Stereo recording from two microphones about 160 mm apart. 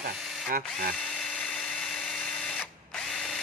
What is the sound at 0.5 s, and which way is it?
Speech, 60° right (ahead or behind).